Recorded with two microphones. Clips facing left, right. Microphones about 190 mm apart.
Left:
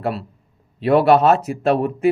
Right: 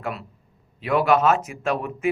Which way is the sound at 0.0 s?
35° left (ahead or behind).